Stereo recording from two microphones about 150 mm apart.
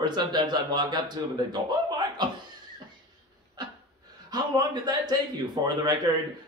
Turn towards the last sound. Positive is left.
turn(degrees=-30)  # may be behind; listen again after turning